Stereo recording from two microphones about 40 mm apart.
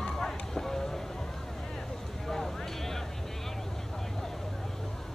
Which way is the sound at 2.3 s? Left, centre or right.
Centre.